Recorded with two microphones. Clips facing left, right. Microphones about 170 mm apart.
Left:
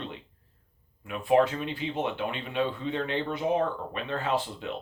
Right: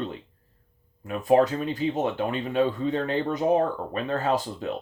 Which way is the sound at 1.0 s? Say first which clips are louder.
Right 3 dB; 40° right (ahead or behind).